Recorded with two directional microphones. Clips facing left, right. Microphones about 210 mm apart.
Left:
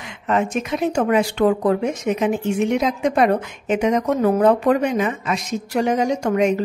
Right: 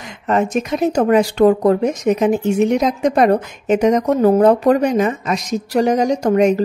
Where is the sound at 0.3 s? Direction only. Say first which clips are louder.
Right 3 dB; 40° right (ahead or behind).